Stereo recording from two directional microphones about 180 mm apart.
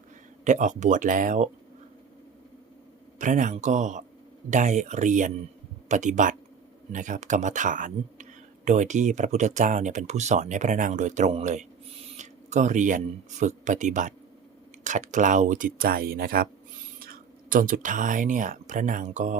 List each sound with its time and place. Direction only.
0.4 s speech: 45° right (ahead or behind)
3.2 s speech: 45° right (ahead or behind)